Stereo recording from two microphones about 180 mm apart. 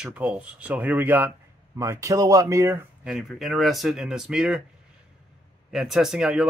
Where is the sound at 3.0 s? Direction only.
Centre (ahead or behind).